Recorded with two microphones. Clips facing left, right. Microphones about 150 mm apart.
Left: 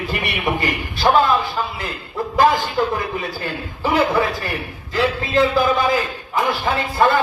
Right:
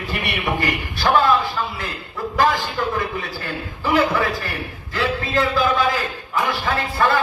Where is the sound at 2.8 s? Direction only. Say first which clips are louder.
Left 3 dB; 20° left (ahead or behind).